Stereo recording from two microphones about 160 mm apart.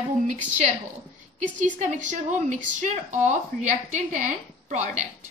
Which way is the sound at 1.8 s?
50° right (ahead or behind).